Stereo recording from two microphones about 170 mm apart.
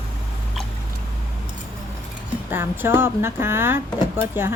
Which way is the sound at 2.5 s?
15° right (ahead or behind).